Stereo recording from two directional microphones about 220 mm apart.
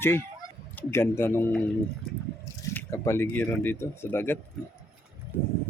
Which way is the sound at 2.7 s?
10° left (ahead or behind).